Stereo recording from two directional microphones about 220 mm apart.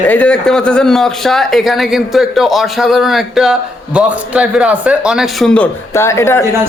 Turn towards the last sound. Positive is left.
turn(degrees=10)  # may be behind; listen again after turning